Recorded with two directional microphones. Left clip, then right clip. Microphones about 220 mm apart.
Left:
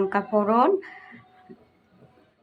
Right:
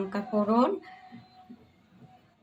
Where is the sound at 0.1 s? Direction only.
20° left (ahead or behind).